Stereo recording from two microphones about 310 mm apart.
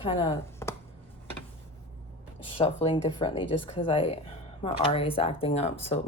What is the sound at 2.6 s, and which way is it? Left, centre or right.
Speech, centre.